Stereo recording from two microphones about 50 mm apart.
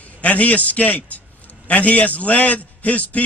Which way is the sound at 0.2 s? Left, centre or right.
Left.